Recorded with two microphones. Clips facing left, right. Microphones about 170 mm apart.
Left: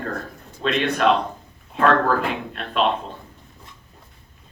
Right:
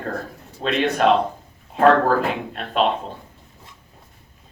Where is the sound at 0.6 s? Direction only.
40° right (ahead or behind).